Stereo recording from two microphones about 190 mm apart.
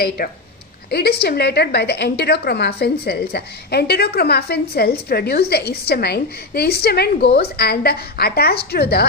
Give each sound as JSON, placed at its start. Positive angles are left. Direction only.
{"t": 0.2, "sound": "a woman's voice", "side_deg": 50}